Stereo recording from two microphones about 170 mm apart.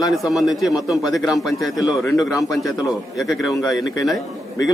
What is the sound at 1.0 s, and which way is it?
Speech, centre (ahead or behind).